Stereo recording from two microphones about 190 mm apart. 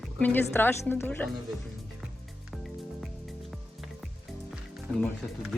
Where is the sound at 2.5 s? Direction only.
Centre (ahead or behind).